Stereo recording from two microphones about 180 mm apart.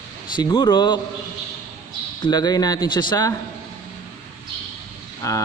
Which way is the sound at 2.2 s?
20° left (ahead or behind).